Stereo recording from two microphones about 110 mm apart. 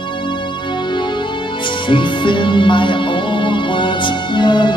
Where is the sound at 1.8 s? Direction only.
45° left (ahead or behind).